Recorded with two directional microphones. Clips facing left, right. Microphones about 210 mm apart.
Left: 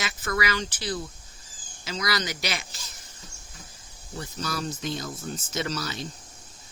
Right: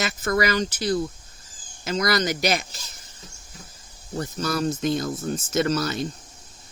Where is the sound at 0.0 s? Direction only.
45° right (ahead or behind).